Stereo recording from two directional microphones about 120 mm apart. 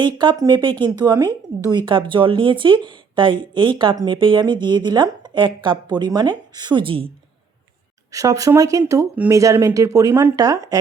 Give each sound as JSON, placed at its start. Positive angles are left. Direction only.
{"t": 0.0, "sound": "a woman's voice", "side_deg": -40}
{"t": 8.1, "sound": "speech", "side_deg": -30}